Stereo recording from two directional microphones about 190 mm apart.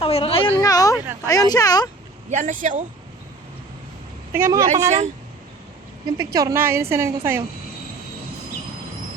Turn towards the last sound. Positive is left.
turn(degrees=-15)  # may be behind; listen again after turning